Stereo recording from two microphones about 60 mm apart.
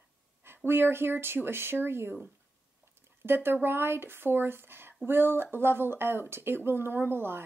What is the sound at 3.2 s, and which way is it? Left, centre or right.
Speech, right.